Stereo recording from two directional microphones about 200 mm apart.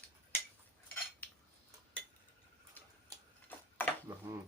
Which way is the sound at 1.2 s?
10° left (ahead or behind).